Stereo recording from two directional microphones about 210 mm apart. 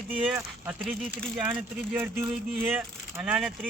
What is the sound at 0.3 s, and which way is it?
Speech, 10° right (ahead or behind).